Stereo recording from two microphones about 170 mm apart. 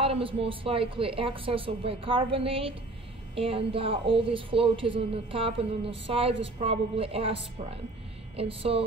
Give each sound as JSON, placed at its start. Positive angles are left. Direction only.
{"t": 0.0, "sound": "a woman's voice", "side_deg": -30}
{"t": 8.4, "sound": "a woman's voice", "side_deg": -35}